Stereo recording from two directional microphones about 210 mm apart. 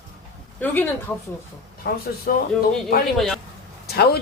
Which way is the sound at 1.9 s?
50° left (ahead or behind).